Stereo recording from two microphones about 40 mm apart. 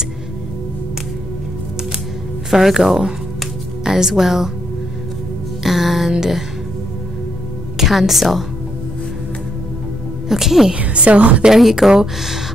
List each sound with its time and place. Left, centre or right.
2.5 s speech: centre
5.6 s music: centre
7.7 s speech: centre
10.2 s speech: centre
10.8 s a woman's voice: right
11.5 s speech: centre